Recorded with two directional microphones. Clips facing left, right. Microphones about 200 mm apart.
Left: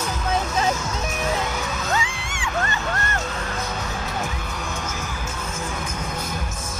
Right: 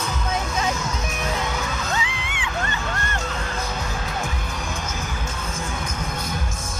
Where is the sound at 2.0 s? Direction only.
45° left (ahead or behind).